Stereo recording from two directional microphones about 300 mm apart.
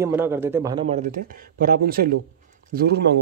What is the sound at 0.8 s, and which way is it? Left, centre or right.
Speech, right.